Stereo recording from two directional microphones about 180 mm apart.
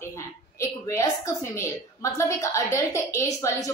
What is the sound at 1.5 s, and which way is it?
A woman's voice, 15° left (ahead or behind).